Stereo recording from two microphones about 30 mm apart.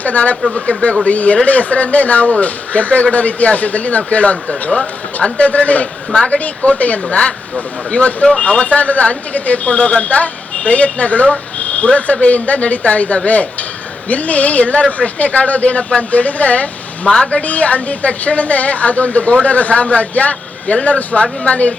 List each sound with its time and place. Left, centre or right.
0.0 s a woman's voice: left
0.5 s a woman's voice: left
1.0 s a woman's voice: left
7.1 s a woman's voice: left
11.6 s a sound: left
12.2 s a woman's voice: left